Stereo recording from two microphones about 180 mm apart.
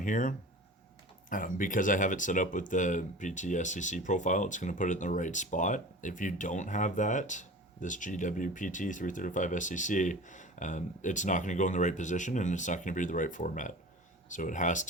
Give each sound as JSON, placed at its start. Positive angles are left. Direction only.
{"t": 0.0, "sound": "speech", "side_deg": 45}